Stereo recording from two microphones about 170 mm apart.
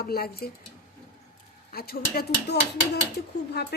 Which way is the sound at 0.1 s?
65° left (ahead or behind).